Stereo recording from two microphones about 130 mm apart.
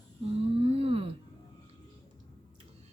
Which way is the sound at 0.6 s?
50° right (ahead or behind).